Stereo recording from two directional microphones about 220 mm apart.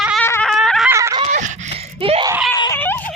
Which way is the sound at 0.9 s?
15° right (ahead or behind).